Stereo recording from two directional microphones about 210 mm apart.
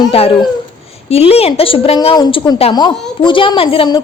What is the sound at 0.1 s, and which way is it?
A woman's voice, 25° left (ahead or behind).